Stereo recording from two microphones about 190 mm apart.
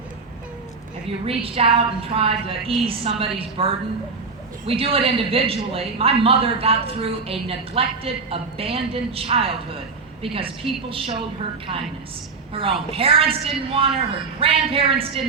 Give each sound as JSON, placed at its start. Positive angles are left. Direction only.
{"t": 1.2, "sound": "a man's voice", "side_deg": -30}
{"t": 12.9, "sound": "a man's voice", "side_deg": -30}